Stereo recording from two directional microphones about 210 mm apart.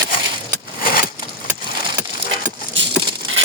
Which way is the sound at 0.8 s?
45° left (ahead or behind).